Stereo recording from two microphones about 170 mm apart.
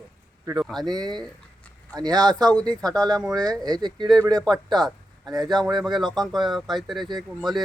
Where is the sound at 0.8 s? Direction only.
25° right (ahead or behind).